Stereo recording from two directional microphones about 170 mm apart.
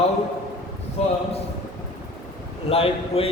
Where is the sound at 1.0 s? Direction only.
35° left (ahead or behind).